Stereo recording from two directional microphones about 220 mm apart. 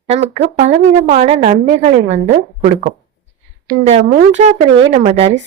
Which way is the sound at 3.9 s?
30° right (ahead or behind).